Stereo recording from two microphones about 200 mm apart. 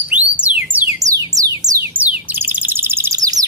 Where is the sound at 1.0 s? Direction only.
15° right (ahead or behind).